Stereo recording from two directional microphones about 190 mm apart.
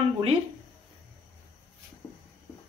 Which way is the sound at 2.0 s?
15° left (ahead or behind).